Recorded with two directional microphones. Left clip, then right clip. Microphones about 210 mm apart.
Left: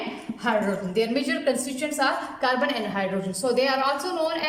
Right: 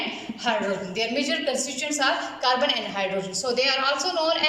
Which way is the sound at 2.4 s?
40° left (ahead or behind).